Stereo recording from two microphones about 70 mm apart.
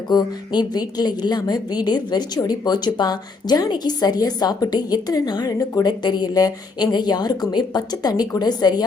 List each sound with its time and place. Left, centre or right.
0.1 s a woman's voice: left
2.4 s a woman's voice: left